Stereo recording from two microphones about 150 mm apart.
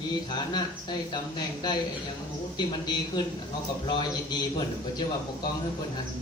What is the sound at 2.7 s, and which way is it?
A man's voice, 30° left (ahead or behind).